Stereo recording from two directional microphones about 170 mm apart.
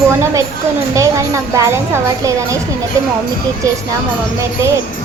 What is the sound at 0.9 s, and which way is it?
Speech, 20° right (ahead or behind).